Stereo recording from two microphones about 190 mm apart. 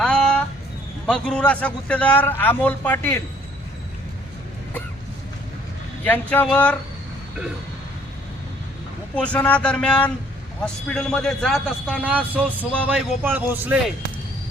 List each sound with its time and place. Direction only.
0.0 s a sound: 5° left (ahead or behind)
1.0 s a man's voice: 5° left (ahead or behind)
6.1 s a man's voice: 5° left (ahead or behind)
9.1 s a man's voice: 5° left (ahead or behind); by 13.7 s 10° right (ahead or behind)